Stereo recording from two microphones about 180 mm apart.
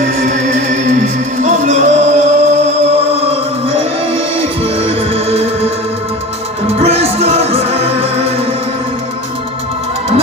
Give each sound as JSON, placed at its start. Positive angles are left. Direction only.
{"t": 0.0, "sound": "music", "side_deg": -40}
{"t": 6.7, "sound": "music", "side_deg": -35}